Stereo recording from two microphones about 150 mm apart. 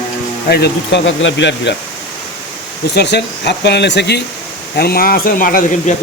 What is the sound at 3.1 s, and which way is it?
Speech, 90° left.